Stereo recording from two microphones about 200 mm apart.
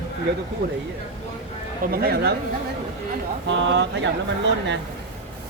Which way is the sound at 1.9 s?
50° right (ahead or behind).